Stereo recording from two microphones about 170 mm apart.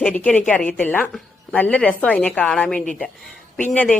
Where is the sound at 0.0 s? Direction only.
5° left (ahead or behind).